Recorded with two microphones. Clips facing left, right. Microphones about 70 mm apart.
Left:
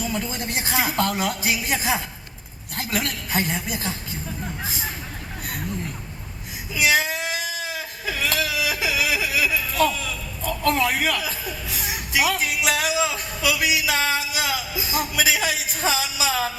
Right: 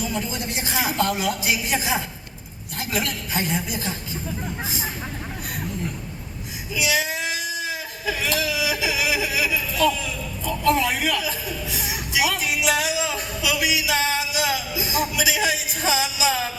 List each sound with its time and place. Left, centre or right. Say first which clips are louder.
0.3 s a woman's voice: left 1 dB; left
0.9 s music: even; left
6.7 s a sound: left 3 dB; left
14.5 s music: right 1 dB; left